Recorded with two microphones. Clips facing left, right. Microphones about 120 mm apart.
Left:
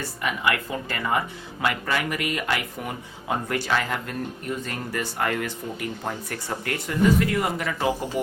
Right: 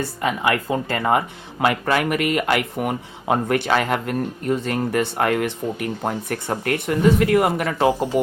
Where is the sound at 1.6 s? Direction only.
50° right (ahead or behind); by 7.4 s 65° right (ahead or behind).